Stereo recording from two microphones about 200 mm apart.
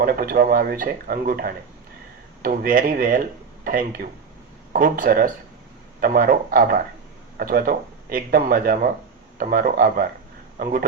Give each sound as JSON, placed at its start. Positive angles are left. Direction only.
{"t": 0.0, "sound": "speech", "side_deg": -50}